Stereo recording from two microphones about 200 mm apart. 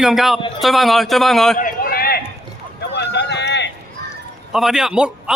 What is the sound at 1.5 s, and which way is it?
Run, 45° left (ahead or behind).